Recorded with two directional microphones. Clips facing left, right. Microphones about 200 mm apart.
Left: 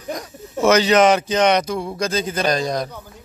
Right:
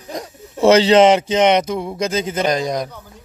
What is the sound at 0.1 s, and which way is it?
Speech, 30° right (ahead or behind).